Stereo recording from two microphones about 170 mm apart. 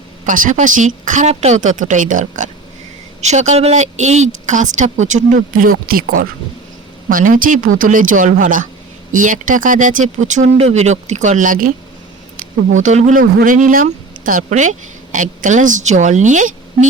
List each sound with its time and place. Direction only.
0.3 s speech: 50° right (ahead or behind)